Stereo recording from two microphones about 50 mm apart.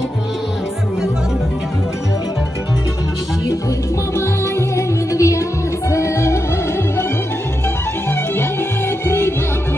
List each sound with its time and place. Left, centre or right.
4.2 s music: left
5.9 s music: left
9.0 s music: left